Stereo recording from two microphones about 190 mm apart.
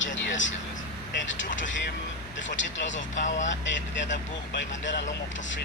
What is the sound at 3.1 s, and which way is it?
Speech, 40° left (ahead or behind).